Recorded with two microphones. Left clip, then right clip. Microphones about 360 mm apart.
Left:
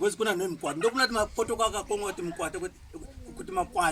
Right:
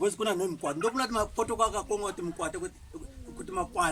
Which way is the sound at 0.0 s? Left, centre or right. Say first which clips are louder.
Left 1 dB; centre.